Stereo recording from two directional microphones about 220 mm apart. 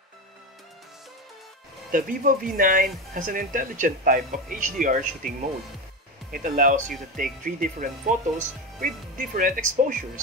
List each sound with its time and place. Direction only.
1.9 s speech: 40° right (ahead or behind)
6.3 s speech: 40° right (ahead or behind)